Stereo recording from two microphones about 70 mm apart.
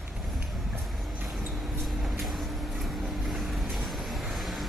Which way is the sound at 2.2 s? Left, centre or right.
Centre.